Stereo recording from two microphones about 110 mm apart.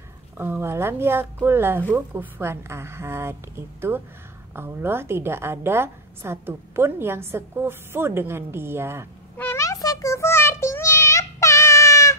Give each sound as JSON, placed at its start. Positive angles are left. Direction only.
{"t": 0.4, "sound": "a woman's voice", "side_deg": -20}
{"t": 4.6, "sound": "a woman's voice", "side_deg": -20}
{"t": 9.4, "sound": "child singing", "side_deg": 25}